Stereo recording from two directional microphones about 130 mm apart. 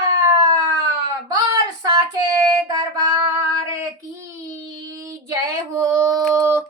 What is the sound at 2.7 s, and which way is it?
Child singing, 30° right (ahead or behind).